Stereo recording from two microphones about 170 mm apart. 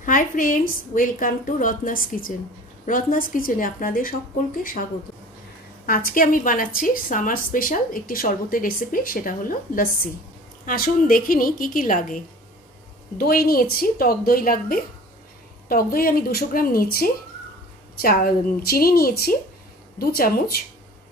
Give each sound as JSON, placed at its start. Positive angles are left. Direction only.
{"t": 0.0, "sound": "a woman's voice", "side_deg": 50}
{"t": 5.9, "sound": "a woman's voice", "side_deg": 55}
{"t": 13.2, "sound": "a woman's voice", "side_deg": 60}